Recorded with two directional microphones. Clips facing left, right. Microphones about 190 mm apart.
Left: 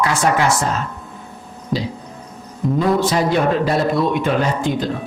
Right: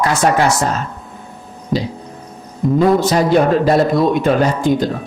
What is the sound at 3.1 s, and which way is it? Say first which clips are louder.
Speech: right 4 dB; 40° right (ahead or behind).